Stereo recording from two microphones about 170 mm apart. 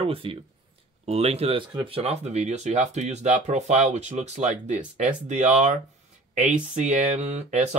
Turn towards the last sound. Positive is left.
turn(degrees=-40)  # may be behind; listen again after turning